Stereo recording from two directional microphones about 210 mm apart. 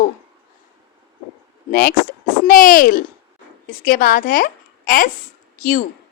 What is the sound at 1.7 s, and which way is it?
A woman's voice, 40° left (ahead or behind).